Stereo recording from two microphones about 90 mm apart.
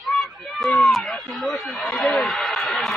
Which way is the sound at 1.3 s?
5° left (ahead or behind).